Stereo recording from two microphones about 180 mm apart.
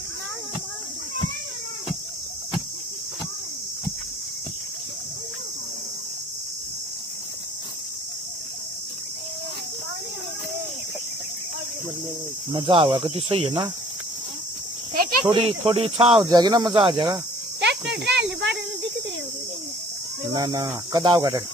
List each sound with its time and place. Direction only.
12.4 s speech: 30° right (ahead or behind)
15.2 s speech: 30° right (ahead or behind)
16.3 s speech: 20° right (ahead or behind)
17.6 s a sound: 75° right (ahead or behind)
20.3 s speech: 20° right (ahead or behind)